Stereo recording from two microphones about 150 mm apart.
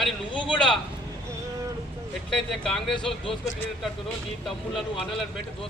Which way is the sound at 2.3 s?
5° left (ahead or behind).